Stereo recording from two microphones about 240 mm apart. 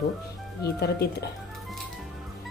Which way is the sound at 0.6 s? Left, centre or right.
Left.